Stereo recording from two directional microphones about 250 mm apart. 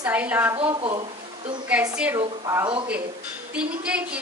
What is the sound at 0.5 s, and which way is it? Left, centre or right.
Speech, centre.